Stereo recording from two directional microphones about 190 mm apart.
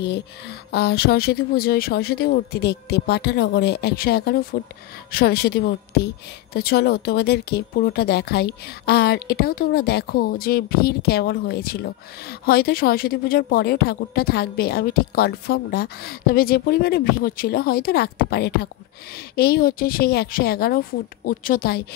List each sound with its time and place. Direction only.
0.0 s speech: 60° left (ahead or behind)